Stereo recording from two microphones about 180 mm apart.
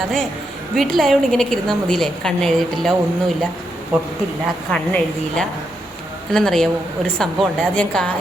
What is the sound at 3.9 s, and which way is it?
Speech, 10° right (ahead or behind).